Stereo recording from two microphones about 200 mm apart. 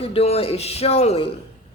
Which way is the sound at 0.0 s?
30° left (ahead or behind).